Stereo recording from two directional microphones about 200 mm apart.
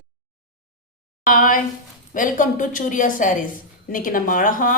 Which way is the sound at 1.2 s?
40° left (ahead or behind).